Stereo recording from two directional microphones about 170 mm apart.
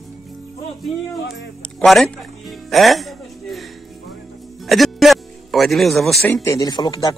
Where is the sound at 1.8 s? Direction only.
5° left (ahead or behind).